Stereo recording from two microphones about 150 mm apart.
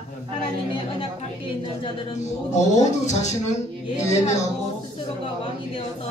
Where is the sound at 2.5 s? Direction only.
50° left (ahead or behind).